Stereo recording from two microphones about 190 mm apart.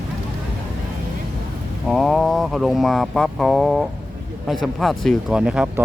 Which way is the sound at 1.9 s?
Centre (ahead or behind).